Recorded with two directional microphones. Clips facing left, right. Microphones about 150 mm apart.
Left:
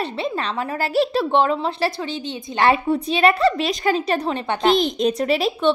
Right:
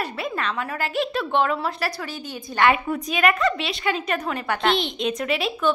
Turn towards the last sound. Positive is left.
turn(degrees=35)  # may be behind; listen again after turning